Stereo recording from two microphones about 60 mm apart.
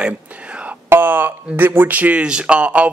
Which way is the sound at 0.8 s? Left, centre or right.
Right.